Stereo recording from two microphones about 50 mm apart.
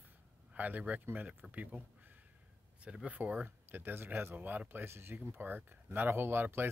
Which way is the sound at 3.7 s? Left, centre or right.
Right.